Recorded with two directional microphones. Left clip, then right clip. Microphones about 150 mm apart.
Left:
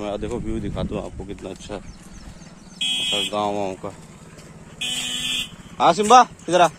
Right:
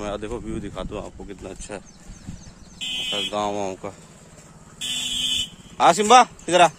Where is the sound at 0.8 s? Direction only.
Centre (ahead or behind).